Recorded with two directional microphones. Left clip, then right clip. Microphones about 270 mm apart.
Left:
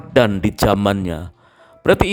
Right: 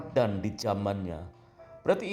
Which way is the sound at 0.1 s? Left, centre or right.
Left.